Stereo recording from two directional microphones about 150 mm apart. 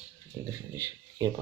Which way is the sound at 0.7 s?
20° right (ahead or behind).